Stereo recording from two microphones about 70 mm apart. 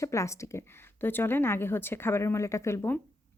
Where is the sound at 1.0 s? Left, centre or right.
Left.